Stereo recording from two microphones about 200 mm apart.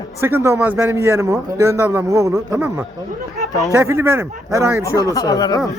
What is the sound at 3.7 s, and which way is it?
A man's voice, 15° right (ahead or behind).